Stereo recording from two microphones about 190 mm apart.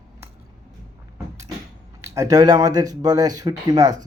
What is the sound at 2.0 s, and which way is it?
Speech, 15° right (ahead or behind).